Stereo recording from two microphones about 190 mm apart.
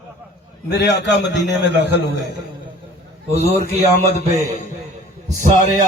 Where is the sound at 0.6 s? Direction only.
60° left (ahead or behind).